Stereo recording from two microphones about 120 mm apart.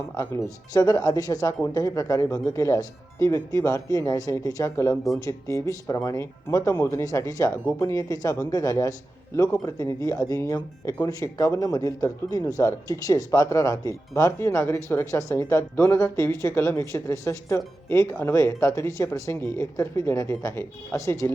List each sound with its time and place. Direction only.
0.1 s speech: 25° left (ahead or behind)